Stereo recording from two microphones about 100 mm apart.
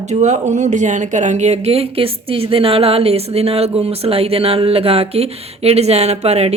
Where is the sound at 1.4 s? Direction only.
90° right.